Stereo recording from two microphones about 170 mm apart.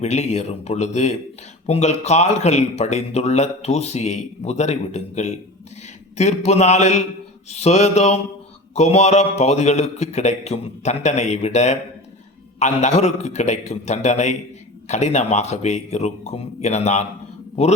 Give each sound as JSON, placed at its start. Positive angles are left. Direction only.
{"t": 0.0, "sound": "a man's voice", "side_deg": 40}